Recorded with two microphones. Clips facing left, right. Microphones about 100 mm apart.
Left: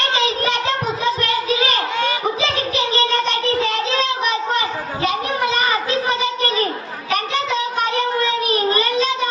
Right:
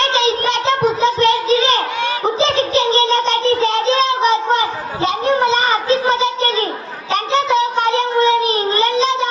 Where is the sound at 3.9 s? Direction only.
30° right (ahead or behind).